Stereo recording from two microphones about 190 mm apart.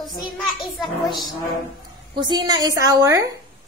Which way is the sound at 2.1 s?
25° right (ahead or behind).